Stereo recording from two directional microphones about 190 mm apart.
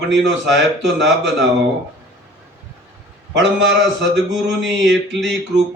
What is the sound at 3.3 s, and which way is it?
Speech, 70° right (ahead or behind).